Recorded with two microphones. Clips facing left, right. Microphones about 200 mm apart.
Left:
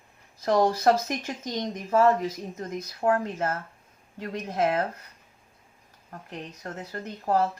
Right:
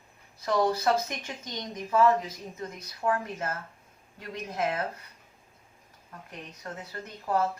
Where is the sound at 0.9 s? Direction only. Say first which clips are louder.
Left 4 dB; 50° left (ahead or behind).